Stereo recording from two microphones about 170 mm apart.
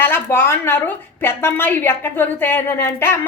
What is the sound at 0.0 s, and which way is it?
A woman's voice, 15° left (ahead or behind).